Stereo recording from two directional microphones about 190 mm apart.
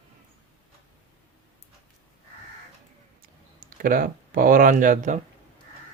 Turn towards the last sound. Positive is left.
turn(degrees=-40)  # may be behind; listen again after turning